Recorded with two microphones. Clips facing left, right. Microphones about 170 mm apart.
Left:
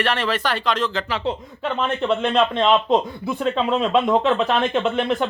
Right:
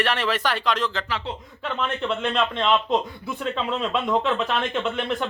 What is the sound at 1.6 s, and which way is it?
Speech, 25° left (ahead or behind).